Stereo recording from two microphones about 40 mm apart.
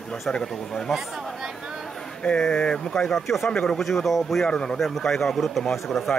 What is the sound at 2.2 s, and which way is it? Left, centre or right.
Speech, left.